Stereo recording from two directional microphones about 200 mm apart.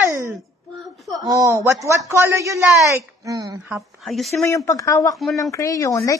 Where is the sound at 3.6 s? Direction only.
Centre (ahead or behind).